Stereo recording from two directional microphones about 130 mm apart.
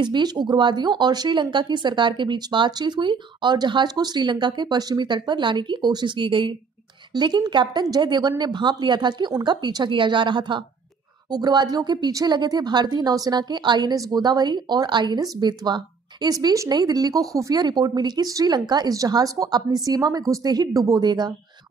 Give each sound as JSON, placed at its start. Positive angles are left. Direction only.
{"t": 0.0, "sound": "speech", "side_deg": -35}